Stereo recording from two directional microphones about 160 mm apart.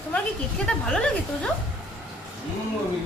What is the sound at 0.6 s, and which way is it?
Speech, 5° left (ahead or behind).